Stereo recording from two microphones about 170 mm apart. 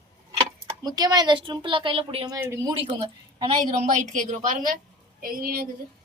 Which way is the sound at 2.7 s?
30° right (ahead or behind).